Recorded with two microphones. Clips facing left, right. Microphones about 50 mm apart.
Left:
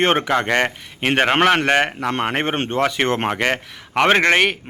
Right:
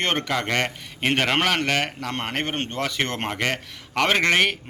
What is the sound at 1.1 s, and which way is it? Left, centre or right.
Speech, left.